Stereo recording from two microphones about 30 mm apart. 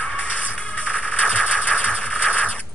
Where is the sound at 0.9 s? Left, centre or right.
Left.